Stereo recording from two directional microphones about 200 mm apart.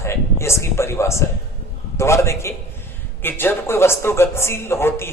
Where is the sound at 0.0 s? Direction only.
15° left (ahead or behind).